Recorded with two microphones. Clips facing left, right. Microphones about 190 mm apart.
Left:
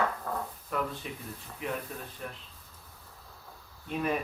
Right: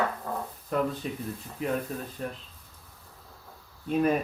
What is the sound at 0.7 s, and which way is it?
Speech, 35° right (ahead or behind).